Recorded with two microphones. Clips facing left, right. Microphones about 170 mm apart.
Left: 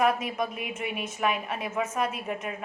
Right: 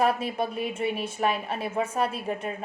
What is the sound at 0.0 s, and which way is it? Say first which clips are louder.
A woman's voice: right 1 dB; 30° right (ahead or behind).